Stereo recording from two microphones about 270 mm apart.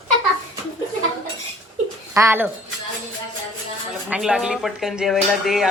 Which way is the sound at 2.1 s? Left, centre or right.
Centre.